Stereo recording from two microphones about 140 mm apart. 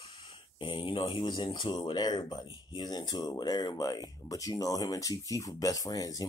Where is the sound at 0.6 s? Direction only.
35° left (ahead or behind).